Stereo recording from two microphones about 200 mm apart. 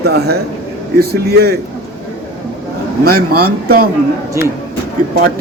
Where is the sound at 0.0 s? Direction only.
55° right (ahead or behind).